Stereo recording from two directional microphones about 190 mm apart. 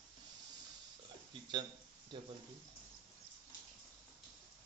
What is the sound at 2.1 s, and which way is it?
Speech, 25° right (ahead or behind).